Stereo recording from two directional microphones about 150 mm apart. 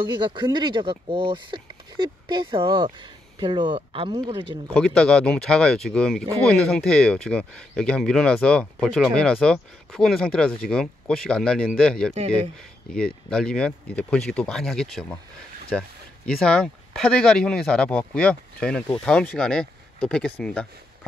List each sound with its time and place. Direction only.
0.0 s speech: 30° right (ahead or behind)
4.7 s speech: 5° left (ahead or behind)
16.3 s speech: 5° left (ahead or behind)